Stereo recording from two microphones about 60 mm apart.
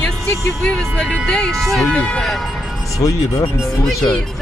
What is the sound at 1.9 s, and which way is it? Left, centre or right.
Speech, centre.